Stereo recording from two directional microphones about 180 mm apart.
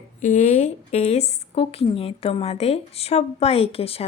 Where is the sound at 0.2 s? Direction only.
45° left (ahead or behind).